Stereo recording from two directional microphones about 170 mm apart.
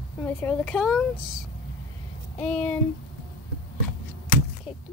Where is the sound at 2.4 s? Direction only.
5° left (ahead or behind).